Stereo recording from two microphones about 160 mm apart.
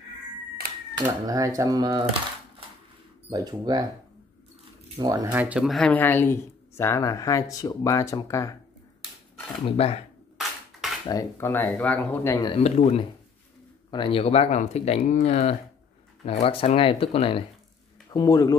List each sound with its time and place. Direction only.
1.0 s speech: 20° right (ahead or behind)
3.3 s speech: 25° right (ahead or behind)
5.0 s speech: 25° right (ahead or behind)
5.3 s speech: 10° right (ahead or behind); by 8.5 s 20° left (ahead or behind)
9.7 s speech: 40° left (ahead or behind)
10.3 s a sound: centre (ahead or behind)
11.1 s speech: 20° left (ahead or behind)
12.4 s speech: 40° left (ahead or behind)
13.8 s speech: 30° left (ahead or behind)
18.1 s speech: 20° left (ahead or behind)